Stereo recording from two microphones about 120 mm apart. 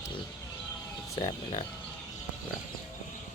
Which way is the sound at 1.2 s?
45° left (ahead or behind).